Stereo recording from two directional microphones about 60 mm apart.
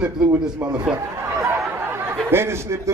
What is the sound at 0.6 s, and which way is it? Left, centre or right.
Speech, right.